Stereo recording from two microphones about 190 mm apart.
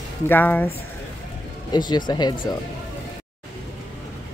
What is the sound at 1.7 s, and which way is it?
Speech, 20° left (ahead or behind).